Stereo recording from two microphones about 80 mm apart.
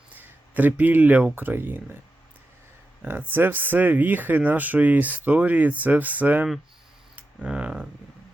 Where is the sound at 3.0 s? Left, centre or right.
Right.